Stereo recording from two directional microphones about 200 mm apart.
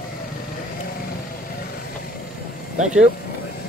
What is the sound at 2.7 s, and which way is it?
Speech, 35° right (ahead or behind).